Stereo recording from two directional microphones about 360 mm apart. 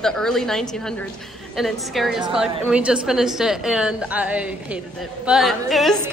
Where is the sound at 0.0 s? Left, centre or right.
Centre.